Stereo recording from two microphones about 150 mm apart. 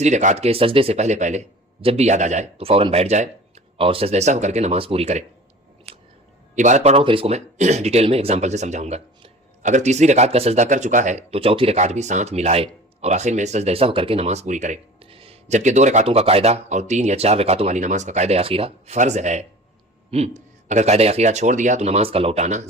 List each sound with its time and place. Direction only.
0.0 s speech: 55° right (ahead or behind)
6.6 s speech: 50° right (ahead or behind)
15.1 s speech: 40° right (ahead or behind)
18.9 s speech: 50° right (ahead or behind)